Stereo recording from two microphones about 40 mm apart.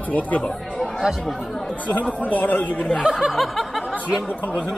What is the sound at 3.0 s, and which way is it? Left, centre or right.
Speech, right.